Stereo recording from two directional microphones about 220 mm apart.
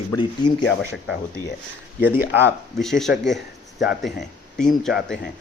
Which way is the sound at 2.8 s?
Centre (ahead or behind).